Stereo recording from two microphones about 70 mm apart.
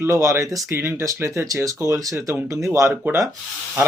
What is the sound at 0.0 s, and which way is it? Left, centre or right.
Speech, right.